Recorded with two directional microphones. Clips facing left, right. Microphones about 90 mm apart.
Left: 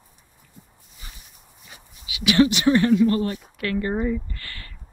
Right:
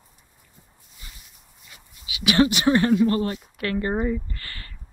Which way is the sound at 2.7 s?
20° right (ahead or behind).